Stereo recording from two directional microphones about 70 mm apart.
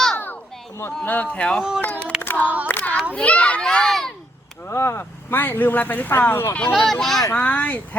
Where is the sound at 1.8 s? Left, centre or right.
Left.